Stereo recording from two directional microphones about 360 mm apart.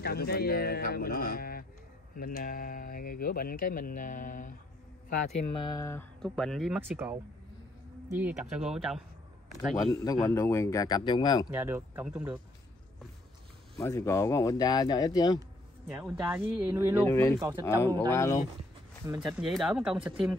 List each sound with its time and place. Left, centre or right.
0.0 s speech: left; by 7.2 s centre
8.2 s speech: centre
9.8 s speech: centre
11.5 s speech: centre
13.7 s speech: centre
15.9 s speech: centre
17.0 s speech: centre
17.4 s speech: centre
17.6 s speech: centre
19.0 s speech: centre